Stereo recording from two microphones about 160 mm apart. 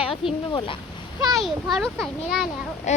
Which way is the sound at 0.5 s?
35° left (ahead or behind).